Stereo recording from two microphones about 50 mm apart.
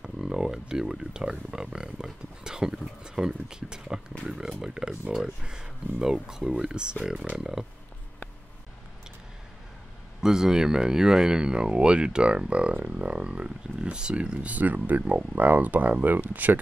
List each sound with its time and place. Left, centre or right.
0.0 s a sound: centre
1.5 s speech: centre
10.2 s speech: centre; by 16.6 s right